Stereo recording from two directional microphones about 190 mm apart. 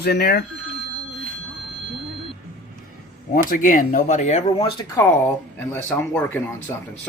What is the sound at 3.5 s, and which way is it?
Speech, 45° left (ahead or behind).